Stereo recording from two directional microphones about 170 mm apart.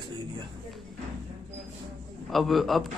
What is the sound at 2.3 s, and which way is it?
Speech, centre (ahead or behind).